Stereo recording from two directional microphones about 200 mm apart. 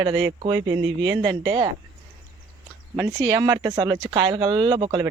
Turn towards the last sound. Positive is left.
turn(degrees=-25)  # may be behind; listen again after turning